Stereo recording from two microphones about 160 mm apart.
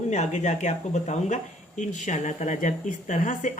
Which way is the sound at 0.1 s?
50° left (ahead or behind).